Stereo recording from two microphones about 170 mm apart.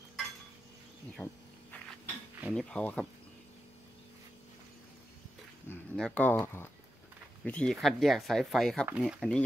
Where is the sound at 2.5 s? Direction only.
5° left (ahead or behind).